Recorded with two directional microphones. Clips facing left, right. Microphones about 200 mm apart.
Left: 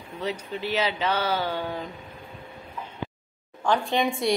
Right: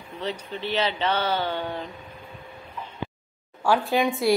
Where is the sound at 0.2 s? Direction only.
5° left (ahead or behind).